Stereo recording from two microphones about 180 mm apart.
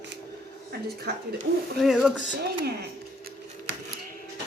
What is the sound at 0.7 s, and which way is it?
Speech, 65° right (ahead or behind).